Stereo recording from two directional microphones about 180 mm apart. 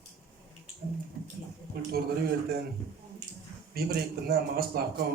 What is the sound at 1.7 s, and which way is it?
Speech, 60° right (ahead or behind).